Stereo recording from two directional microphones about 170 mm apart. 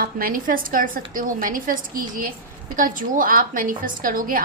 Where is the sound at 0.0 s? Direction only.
60° right (ahead or behind).